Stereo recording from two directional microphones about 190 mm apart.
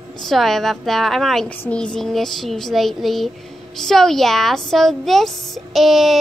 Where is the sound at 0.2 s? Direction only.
Centre (ahead or behind).